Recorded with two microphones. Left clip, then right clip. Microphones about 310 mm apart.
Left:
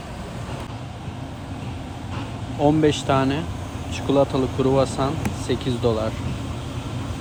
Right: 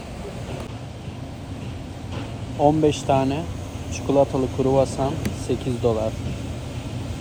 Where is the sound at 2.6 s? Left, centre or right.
Centre.